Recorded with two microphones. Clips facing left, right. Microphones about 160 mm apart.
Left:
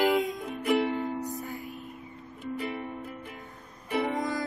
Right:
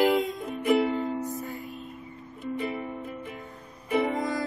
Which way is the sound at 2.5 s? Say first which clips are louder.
Right 3 dB; centre (ahead or behind).